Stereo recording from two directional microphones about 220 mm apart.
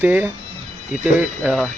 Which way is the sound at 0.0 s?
10° right (ahead or behind).